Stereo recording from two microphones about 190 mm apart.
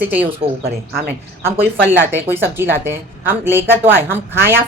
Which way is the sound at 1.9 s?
10° right (ahead or behind).